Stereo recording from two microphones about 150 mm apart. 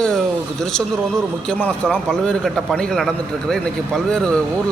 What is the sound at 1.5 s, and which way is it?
A man's voice, 5° left (ahead or behind).